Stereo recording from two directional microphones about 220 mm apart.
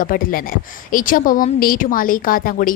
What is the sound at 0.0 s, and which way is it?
Speech, 40° left (ahead or behind).